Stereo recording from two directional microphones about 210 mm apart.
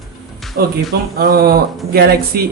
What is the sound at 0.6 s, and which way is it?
Speech, 45° right (ahead or behind).